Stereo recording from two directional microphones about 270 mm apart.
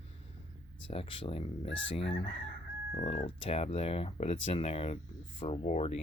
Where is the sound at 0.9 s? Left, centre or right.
Left.